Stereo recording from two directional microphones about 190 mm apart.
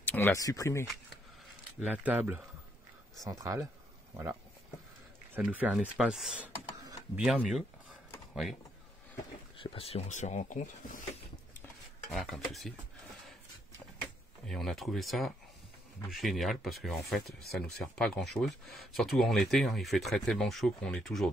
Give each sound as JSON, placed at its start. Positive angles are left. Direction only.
{"t": 0.0, "sound": "speech", "side_deg": 10}
{"t": 1.9, "sound": "speech", "side_deg": -10}
{"t": 9.6, "sound": "speech", "side_deg": 30}
{"t": 12.1, "sound": "speech", "side_deg": 0}
{"t": 14.5, "sound": "speech", "side_deg": 0}